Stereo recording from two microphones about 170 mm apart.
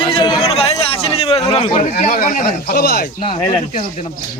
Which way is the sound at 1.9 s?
55° left (ahead or behind).